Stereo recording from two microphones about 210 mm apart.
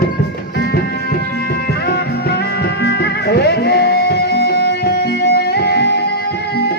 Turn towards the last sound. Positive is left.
turn(degrees=55)  # may be behind; listen again after turning